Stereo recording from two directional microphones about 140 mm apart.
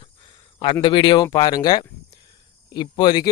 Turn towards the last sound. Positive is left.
turn(degrees=30)  # may be behind; listen again after turning